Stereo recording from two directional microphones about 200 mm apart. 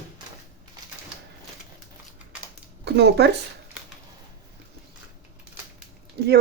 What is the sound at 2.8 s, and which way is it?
Speech, 60° right (ahead or behind).